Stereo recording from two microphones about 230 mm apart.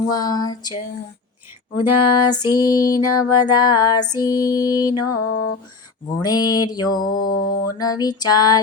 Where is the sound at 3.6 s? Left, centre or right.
Centre.